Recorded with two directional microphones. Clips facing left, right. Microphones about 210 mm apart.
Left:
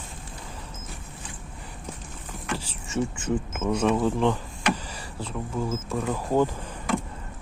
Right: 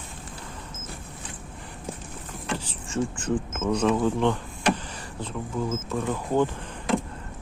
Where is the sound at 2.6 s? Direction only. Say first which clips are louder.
Left 1 dB; 10° left (ahead or behind).